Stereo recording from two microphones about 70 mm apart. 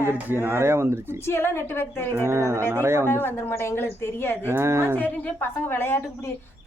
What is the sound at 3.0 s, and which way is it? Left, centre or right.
A woman's voice, left.